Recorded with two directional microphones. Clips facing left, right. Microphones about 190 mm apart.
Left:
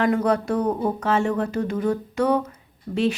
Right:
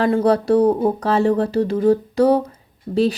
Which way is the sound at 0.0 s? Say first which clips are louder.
Right 4 dB; 30° right (ahead or behind).